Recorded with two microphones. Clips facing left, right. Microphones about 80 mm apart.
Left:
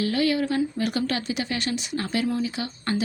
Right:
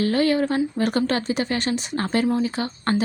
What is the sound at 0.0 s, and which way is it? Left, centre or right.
A woman's voice, right.